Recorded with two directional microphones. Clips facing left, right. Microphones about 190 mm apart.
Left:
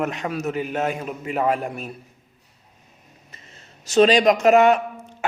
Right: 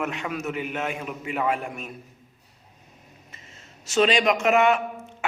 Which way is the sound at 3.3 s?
35° left (ahead or behind).